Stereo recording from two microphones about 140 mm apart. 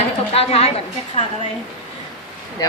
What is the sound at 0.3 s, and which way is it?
Speech, 45° left (ahead or behind).